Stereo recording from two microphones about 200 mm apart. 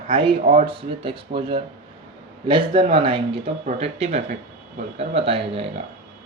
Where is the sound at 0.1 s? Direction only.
25° right (ahead or behind).